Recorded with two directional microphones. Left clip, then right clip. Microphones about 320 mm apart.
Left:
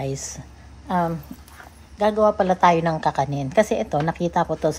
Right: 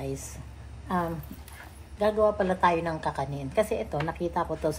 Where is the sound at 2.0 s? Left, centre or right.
Left.